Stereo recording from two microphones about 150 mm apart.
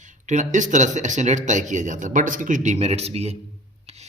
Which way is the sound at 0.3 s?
55° right (ahead or behind).